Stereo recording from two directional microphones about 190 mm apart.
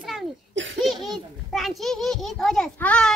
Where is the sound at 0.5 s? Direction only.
75° right (ahead or behind).